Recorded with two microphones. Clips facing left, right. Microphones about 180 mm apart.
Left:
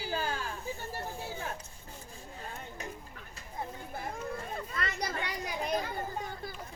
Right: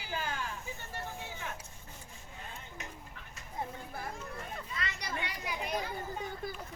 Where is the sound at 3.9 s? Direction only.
25° left (ahead or behind).